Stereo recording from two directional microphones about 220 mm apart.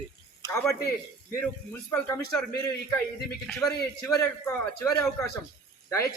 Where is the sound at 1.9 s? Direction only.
10° left (ahead or behind).